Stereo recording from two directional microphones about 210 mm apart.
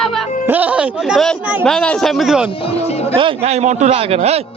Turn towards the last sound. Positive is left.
turn(degrees=-30)  # may be behind; listen again after turning